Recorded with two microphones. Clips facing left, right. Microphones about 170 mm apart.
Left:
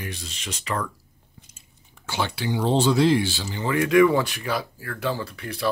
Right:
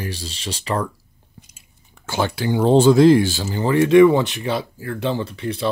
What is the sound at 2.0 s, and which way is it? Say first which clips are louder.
Speech: right 5 dB; 45° right (ahead or behind).